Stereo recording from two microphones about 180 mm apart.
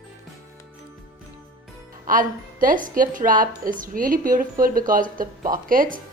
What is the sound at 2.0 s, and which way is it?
A woman's voice, 50° right (ahead or behind).